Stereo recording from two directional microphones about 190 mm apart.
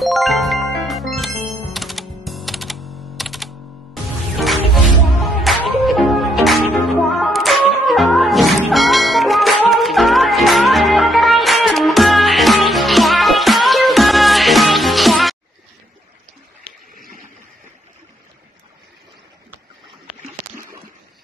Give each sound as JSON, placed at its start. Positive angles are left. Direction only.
{"t": 0.0, "sound": "music", "side_deg": 0}